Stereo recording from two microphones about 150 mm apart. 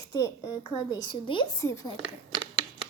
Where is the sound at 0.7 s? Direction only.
30° left (ahead or behind).